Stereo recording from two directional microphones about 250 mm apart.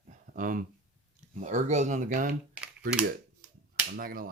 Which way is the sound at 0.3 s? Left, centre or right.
Right.